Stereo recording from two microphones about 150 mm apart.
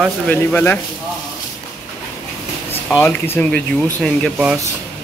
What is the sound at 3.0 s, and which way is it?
Speech, 10° left (ahead or behind).